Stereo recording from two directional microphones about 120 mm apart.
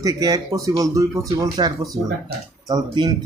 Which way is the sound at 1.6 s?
40° right (ahead or behind).